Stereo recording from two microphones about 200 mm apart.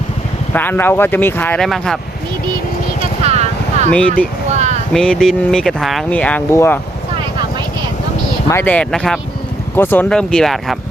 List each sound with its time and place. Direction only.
0.5 s speech: 10° left (ahead or behind)
3.2 s vehicle: 35° right (ahead or behind)
4.5 s a sound: 35° right (ahead or behind)
4.9 s speech: 5° left (ahead or behind)
8.4 s speech: 10° left (ahead or behind)